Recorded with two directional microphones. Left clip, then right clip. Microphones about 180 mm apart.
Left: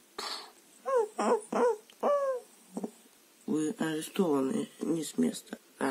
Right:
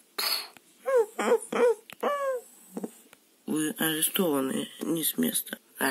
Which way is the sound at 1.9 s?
10° right (ahead or behind).